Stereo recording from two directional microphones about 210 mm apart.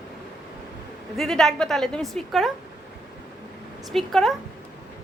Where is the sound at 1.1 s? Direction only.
Centre (ahead or behind).